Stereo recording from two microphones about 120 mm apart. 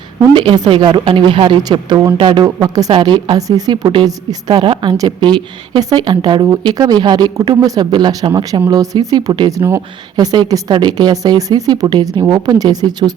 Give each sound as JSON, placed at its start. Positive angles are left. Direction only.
{"t": 0.3, "sound": "a woman's voice", "side_deg": -40}
{"t": 10.3, "sound": "a woman's voice", "side_deg": -35}